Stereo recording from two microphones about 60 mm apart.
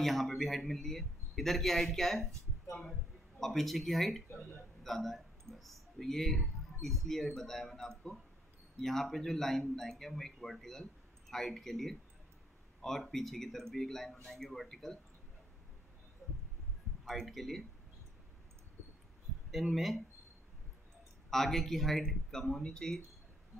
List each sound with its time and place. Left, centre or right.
0.0 s speech: centre
3.3 s speech: centre
17.0 s speech: centre
19.6 s speech: centre
21.3 s speech: centre